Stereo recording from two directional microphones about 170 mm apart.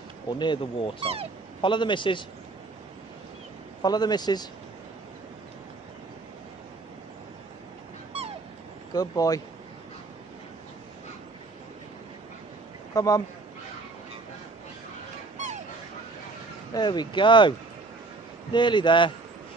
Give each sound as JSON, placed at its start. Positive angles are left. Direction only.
{"t": 0.3, "sound": "speech", "side_deg": 25}
{"t": 3.8, "sound": "speech", "side_deg": 25}
{"t": 8.9, "sound": "speech", "side_deg": 20}
{"t": 12.9, "sound": "speech", "side_deg": 20}
{"t": 15.3, "sound": "a sound", "side_deg": -45}
{"t": 16.7, "sound": "speech", "side_deg": 25}